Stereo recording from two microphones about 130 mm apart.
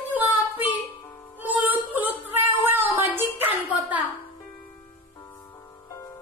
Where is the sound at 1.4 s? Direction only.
15° right (ahead or behind).